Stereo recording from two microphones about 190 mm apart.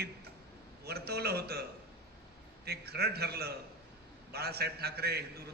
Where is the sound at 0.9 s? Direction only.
55° right (ahead or behind).